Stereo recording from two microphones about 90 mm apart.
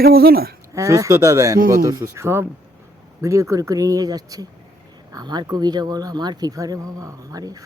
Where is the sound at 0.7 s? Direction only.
35° right (ahead or behind).